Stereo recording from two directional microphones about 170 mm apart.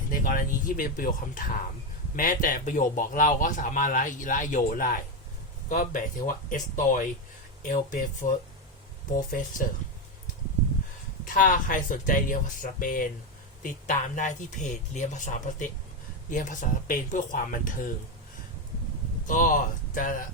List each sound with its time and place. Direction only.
0.1 s speech: 55° left (ahead or behind)
11.3 s speech: 50° left (ahead or behind)
19.3 s speech: 50° left (ahead or behind)